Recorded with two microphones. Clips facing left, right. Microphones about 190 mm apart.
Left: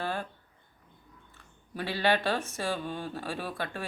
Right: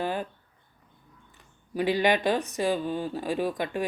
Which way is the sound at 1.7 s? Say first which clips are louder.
Right 5 dB; 15° right (ahead or behind).